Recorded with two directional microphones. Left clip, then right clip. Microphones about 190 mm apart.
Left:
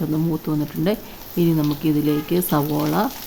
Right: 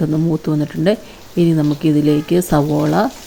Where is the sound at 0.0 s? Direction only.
15° right (ahead or behind).